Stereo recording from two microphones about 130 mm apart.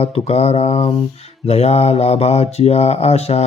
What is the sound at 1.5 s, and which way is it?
Mantra, 55° left (ahead or behind).